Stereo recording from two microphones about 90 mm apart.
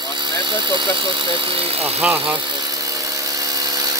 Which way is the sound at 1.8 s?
20° right (ahead or behind).